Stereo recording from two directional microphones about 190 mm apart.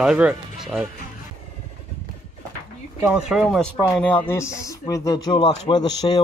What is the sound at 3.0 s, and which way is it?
Speech, centre (ahead or behind).